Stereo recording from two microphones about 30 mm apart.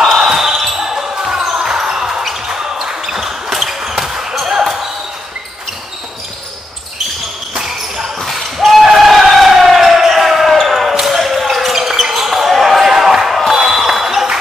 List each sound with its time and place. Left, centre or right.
0.0 s basketball bounce: centre
4.1 s basketball bounce: right
8.2 s basketball bounce: centre
11.7 s basketball bounce: centre